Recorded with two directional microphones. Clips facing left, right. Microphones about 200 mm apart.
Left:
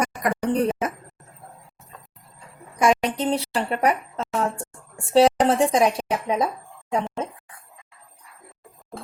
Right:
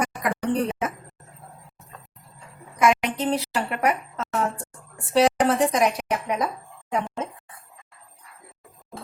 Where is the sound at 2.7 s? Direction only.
30° left (ahead or behind).